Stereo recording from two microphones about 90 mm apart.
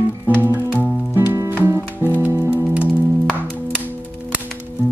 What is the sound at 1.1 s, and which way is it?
Music, 25° right (ahead or behind).